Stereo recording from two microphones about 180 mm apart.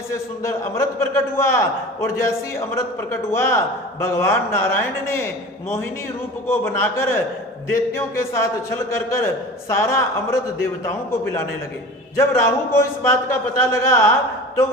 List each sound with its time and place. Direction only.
0.4 s a man's voice: 15° left (ahead or behind)
6.5 s a man's voice: 10° left (ahead or behind)